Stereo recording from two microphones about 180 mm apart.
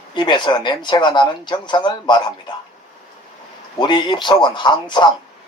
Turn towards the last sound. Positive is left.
turn(degrees=25)  # may be behind; listen again after turning